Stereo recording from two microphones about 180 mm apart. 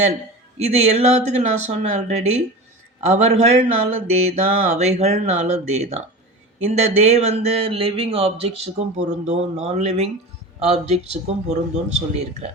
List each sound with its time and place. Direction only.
0.6 s speech: 35° right (ahead or behind)